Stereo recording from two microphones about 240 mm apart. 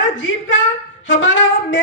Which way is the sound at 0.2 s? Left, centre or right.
Left.